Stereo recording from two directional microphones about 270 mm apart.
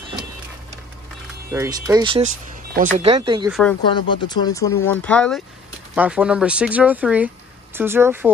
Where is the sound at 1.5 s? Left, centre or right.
Centre.